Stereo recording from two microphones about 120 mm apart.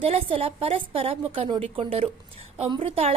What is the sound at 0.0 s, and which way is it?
A woman's voice, 55° right (ahead or behind).